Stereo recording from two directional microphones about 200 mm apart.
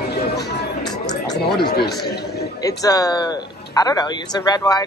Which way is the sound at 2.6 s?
20° left (ahead or behind).